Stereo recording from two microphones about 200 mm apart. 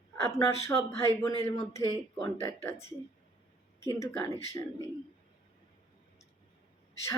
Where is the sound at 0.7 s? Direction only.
15° left (ahead or behind).